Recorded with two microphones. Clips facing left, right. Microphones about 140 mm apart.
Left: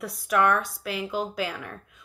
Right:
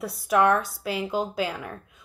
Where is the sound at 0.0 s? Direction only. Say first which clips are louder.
Right 2 dB; 25° right (ahead or behind).